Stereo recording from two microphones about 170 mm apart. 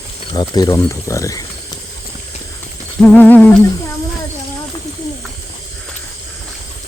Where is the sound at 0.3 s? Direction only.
20° left (ahead or behind).